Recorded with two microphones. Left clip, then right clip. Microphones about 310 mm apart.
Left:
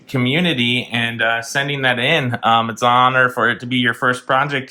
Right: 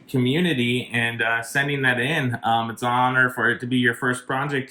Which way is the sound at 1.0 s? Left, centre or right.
Centre.